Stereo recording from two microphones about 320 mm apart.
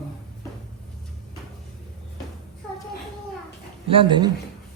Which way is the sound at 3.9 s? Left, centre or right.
Centre.